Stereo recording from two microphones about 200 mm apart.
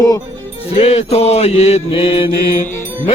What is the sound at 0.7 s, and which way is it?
Mantra, 30° left (ahead or behind).